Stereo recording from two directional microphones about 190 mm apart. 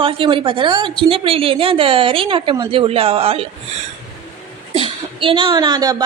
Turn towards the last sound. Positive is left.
turn(degrees=-20)  # may be behind; listen again after turning